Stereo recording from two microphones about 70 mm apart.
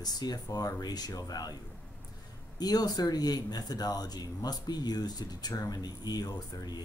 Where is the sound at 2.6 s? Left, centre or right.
Left.